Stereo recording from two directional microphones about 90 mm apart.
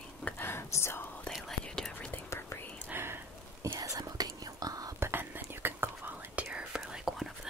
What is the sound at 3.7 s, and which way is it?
Whispering, 40° right (ahead or behind).